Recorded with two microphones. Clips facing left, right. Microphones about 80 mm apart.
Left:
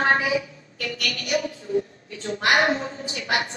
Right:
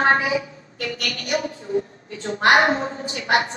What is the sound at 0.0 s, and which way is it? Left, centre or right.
A woman's voice, right.